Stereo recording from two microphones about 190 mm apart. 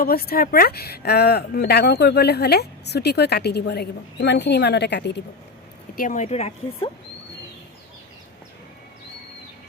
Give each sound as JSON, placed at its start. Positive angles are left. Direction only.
{"t": 0.0, "sound": "speech", "side_deg": 50}
{"t": 6.0, "sound": "speech", "side_deg": 40}